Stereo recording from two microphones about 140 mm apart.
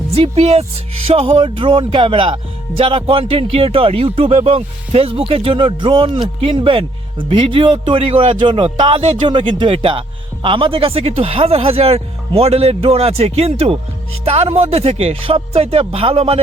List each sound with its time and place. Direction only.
0.1 s speech: 45° right (ahead or behind)